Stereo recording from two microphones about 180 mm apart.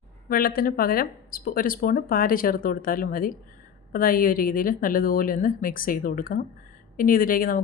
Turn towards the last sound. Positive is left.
turn(degrees=50)  # may be behind; listen again after turning